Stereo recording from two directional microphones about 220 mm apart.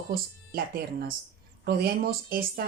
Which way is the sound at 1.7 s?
45° right (ahead or behind).